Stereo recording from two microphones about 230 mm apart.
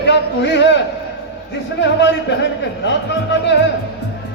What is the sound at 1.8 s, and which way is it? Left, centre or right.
A man's voice, left.